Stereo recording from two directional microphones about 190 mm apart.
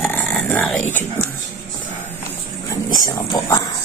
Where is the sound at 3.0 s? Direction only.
20° left (ahead or behind).